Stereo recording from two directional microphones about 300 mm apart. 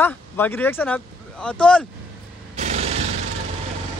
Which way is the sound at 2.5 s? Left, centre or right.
Right.